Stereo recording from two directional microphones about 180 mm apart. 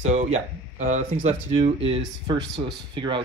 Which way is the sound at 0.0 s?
40° right (ahead or behind).